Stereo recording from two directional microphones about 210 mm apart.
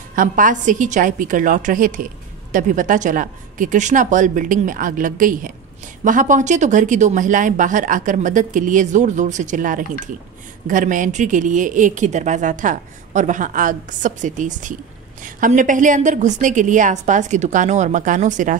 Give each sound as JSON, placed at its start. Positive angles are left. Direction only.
{"t": 0.1, "sound": "speech", "side_deg": -40}